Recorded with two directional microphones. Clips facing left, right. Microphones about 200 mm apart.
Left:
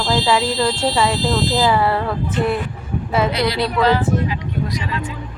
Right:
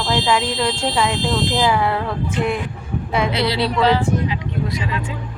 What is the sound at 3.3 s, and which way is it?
Speech, 25° right (ahead or behind).